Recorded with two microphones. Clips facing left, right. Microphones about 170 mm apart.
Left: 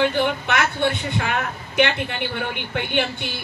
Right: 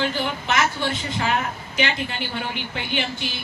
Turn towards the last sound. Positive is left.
turn(degrees=60)  # may be behind; listen again after turning